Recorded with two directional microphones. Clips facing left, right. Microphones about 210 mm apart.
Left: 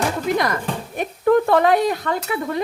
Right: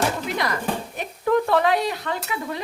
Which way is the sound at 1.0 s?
50° left (ahead or behind).